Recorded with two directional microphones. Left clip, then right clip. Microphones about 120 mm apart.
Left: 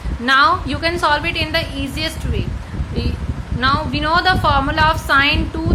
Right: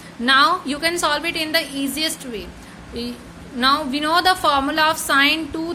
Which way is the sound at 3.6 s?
45° right (ahead or behind).